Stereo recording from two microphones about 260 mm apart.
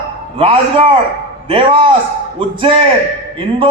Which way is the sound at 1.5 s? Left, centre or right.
Centre.